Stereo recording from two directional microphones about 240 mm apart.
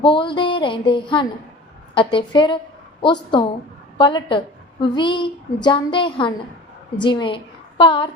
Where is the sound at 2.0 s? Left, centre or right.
Centre.